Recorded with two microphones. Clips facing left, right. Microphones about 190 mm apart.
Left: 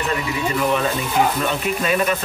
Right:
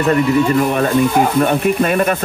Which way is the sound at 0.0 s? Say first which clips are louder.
Right 10 dB; 50° right (ahead or behind).